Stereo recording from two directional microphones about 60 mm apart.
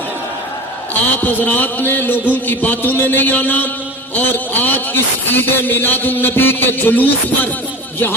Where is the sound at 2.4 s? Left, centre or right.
Left.